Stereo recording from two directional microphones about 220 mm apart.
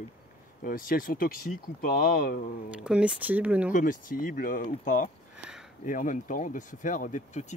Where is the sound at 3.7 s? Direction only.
40° left (ahead or behind).